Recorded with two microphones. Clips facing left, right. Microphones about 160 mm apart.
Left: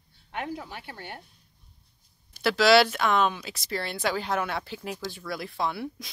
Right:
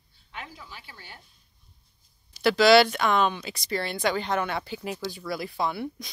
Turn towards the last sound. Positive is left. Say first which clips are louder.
# right 1 dB
turn(degrees=0)  # may be behind; listen again after turning